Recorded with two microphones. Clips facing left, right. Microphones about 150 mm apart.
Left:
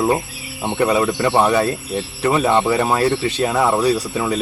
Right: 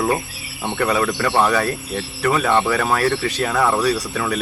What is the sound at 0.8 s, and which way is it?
Speech, 20° left (ahead or behind).